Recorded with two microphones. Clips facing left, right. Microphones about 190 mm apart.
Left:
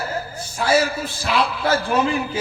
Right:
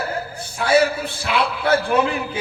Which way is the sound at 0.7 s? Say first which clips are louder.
Right 3 dB; 60° right (ahead or behind).